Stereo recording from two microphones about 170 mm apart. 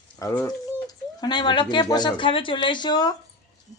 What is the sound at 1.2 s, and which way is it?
Speech, 25° left (ahead or behind).